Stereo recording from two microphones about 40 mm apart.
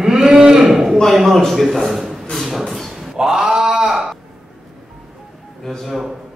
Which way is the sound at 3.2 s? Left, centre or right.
Centre.